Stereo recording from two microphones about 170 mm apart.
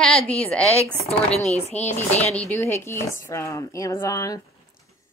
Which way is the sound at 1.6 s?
40° left (ahead or behind).